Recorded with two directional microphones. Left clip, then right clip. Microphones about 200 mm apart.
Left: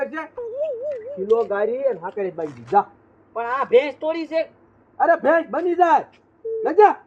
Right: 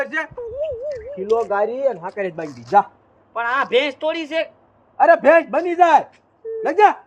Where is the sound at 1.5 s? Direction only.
40° right (ahead or behind).